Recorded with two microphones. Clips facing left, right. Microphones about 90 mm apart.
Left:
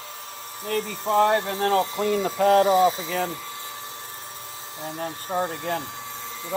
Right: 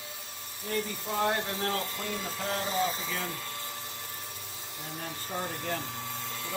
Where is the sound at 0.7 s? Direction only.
70° left (ahead or behind).